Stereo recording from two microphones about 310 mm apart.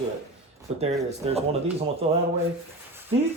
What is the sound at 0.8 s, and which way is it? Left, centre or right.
Speech, right.